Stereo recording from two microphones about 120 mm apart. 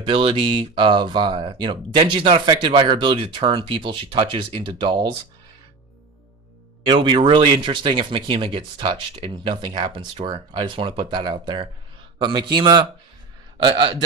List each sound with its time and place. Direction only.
0.0 s speech: 45° right (ahead or behind)
6.9 s a man's voice: 40° right (ahead or behind)